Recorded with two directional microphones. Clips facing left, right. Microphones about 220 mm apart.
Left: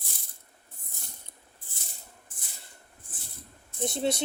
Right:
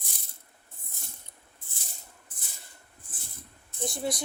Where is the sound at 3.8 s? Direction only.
25° left (ahead or behind).